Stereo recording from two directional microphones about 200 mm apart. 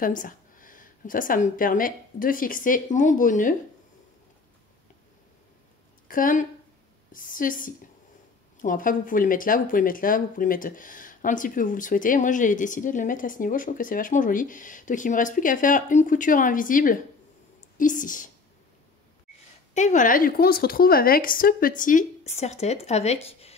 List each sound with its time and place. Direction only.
0.0 s speech: 40° left (ahead or behind)
6.0 s a woman's voice: 45° left (ahead or behind)
19.7 s a woman's voice: 40° left (ahead or behind)